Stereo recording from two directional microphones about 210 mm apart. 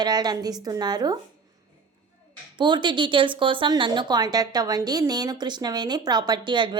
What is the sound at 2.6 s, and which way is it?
A woman's voice, 20° right (ahead or behind).